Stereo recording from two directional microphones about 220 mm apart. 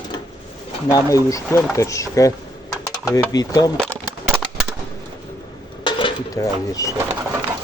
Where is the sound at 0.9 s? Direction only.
15° left (ahead or behind).